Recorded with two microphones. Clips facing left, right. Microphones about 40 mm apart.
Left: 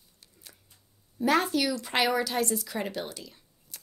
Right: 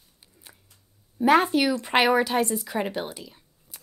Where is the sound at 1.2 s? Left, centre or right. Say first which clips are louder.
Right 6 dB; right.